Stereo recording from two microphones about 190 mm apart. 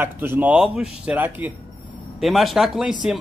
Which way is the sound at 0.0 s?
10° right (ahead or behind).